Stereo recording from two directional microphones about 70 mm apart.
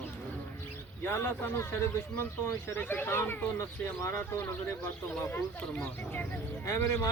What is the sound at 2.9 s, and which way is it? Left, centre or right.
Speech, left.